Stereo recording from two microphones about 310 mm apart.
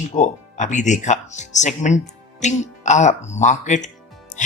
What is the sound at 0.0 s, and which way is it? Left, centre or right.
Speech, left.